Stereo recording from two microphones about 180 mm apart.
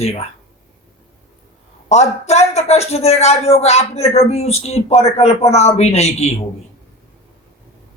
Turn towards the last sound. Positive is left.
turn(degrees=35)  # may be behind; listen again after turning